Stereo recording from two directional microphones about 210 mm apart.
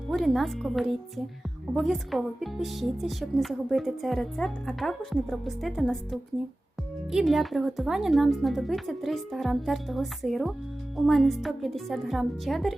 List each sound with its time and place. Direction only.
0.1 s a woman's voice: centre (ahead or behind)